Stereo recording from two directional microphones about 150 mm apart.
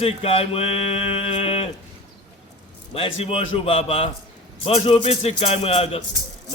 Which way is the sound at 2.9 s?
40° left (ahead or behind).